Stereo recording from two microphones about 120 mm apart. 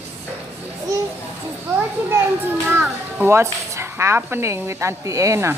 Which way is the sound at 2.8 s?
20° right (ahead or behind).